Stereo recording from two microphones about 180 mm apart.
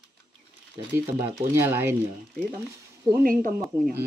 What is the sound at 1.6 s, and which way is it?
Speech, 10° right (ahead or behind).